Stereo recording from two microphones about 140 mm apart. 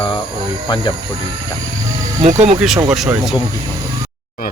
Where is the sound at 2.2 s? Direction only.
55° right (ahead or behind).